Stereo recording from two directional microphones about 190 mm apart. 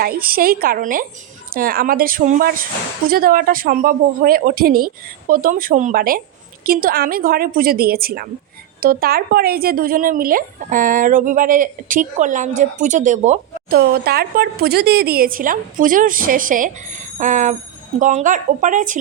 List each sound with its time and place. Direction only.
0.0 s speech: 50° right (ahead or behind)
13.7 s speech: 55° right (ahead or behind)